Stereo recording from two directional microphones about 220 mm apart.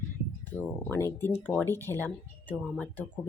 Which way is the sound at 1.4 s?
10° left (ahead or behind).